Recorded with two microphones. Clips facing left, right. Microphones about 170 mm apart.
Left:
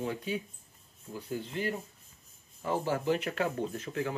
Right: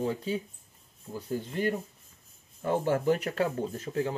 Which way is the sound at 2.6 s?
55° right (ahead or behind).